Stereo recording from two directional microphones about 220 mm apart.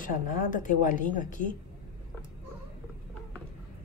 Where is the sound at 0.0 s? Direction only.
35° left (ahead or behind).